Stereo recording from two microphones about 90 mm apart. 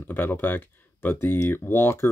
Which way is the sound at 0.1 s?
25° left (ahead or behind).